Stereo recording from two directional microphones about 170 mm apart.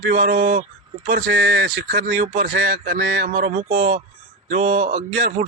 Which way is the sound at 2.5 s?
70° right (ahead or behind).